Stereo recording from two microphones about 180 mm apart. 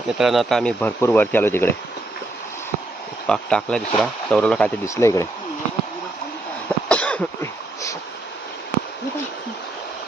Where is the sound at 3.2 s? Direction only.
5° left (ahead or behind).